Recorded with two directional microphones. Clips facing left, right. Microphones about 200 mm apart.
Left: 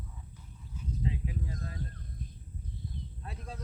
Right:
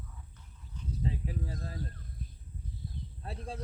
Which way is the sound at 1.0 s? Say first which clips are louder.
Even; 35° right (ahead or behind).